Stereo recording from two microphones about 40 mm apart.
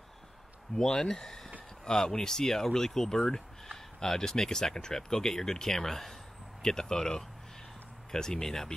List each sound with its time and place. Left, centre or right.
0.7 s speech: centre